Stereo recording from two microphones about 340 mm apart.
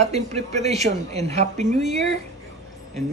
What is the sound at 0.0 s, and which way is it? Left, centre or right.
Speech, centre.